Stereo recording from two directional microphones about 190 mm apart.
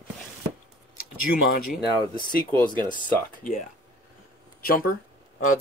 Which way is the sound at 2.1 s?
25° right (ahead or behind).